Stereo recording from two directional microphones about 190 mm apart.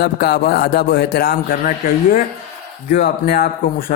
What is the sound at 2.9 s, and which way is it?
Speech, 55° left (ahead or behind).